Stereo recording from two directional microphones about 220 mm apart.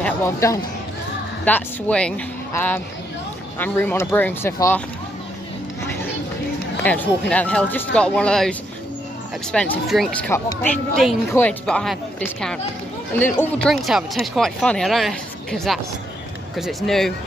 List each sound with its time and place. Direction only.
0.0 s speech: 10° left (ahead or behind)
6.8 s speech: 5° left (ahead or behind)
10.3 s speech: 10° left (ahead or behind)
11.0 s speech: centre (ahead or behind)